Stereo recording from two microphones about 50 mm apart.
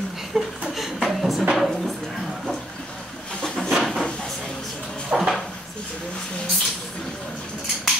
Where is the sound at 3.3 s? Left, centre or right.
Centre.